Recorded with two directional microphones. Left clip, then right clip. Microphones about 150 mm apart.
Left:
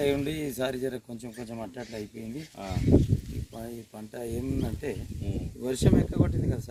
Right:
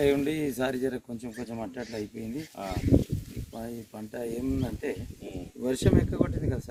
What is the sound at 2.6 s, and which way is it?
Speech, 5° right (ahead or behind).